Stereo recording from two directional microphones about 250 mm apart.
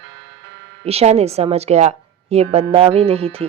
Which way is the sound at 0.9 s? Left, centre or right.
Right.